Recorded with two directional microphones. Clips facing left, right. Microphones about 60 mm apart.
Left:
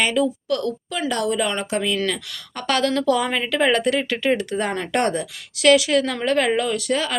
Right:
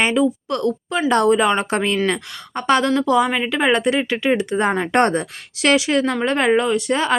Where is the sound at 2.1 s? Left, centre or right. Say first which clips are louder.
Right 4 dB; right.